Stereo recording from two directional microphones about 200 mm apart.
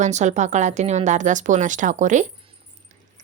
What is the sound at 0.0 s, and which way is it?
A woman's voice, 35° right (ahead or behind).